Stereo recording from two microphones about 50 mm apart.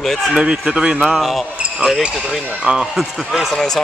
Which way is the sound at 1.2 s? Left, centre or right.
Centre.